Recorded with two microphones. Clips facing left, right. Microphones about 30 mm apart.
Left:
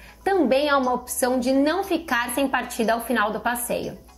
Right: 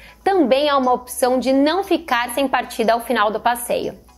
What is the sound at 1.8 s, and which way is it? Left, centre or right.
A woman's voice, right.